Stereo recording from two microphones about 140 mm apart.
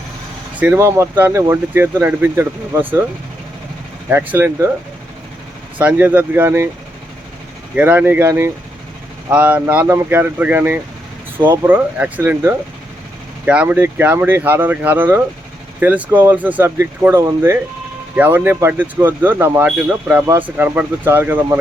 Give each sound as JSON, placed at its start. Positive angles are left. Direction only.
{"t": 0.6, "sound": "speech", "side_deg": -15}
{"t": 4.1, "sound": "speech", "side_deg": -15}
{"t": 5.7, "sound": "speech", "side_deg": -10}
{"t": 7.8, "sound": "speech", "side_deg": -10}